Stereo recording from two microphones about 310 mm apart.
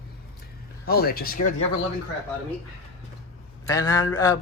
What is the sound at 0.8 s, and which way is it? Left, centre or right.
Speech, left.